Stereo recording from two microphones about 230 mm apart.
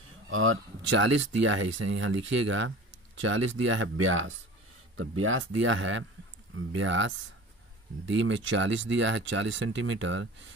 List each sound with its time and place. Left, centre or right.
0.3 s speech: right